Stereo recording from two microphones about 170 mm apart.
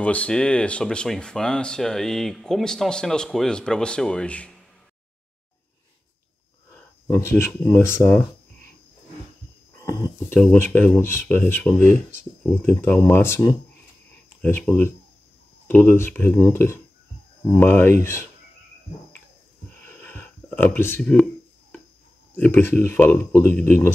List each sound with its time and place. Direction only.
0.0 s speech: 5° left (ahead or behind)
6.7 s speech: 15° left (ahead or behind)
9.8 s speech: 15° left (ahead or behind)
19.8 s a sound: 10° left (ahead or behind)
22.3 s speech: 10° left (ahead or behind)